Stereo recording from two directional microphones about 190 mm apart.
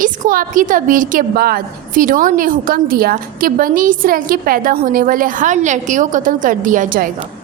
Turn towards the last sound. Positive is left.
turn(degrees=-45)  # may be behind; listen again after turning